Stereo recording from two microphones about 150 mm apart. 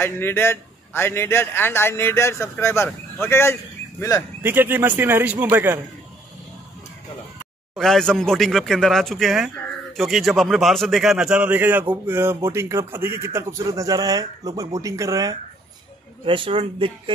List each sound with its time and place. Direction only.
0.0 s a man's voice: 15° left (ahead or behind)
4.4 s a man's voice: 15° right (ahead or behind)
7.7 s a man's voice: 5° left (ahead or behind); by 15.3 s 20° right (ahead or behind)
16.3 s speech: 35° right (ahead or behind)